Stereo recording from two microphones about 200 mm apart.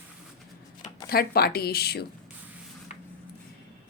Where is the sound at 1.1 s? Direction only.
50° left (ahead or behind).